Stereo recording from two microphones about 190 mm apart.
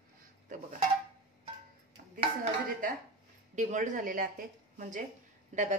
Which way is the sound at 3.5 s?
40° right (ahead or behind).